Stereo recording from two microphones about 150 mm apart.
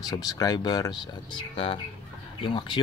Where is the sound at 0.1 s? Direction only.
25° left (ahead or behind).